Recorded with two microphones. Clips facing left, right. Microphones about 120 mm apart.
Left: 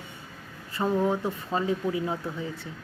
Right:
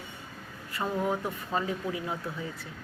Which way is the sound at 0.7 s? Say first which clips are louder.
Left 5 dB; 30° left (ahead or behind).